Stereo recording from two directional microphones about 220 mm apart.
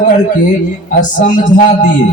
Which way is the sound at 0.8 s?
35° left (ahead or behind).